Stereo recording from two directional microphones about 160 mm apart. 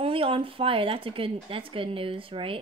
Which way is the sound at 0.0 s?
35° right (ahead or behind).